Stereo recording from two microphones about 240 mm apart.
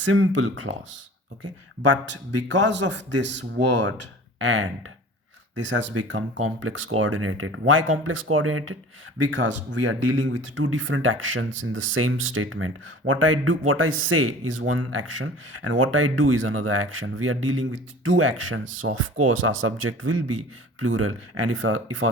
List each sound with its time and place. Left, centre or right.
0.0 s speech: right
1.9 s speech: right
9.2 s speech: right